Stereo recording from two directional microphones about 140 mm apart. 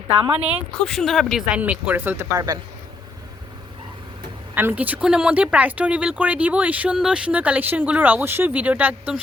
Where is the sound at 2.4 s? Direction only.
25° right (ahead or behind).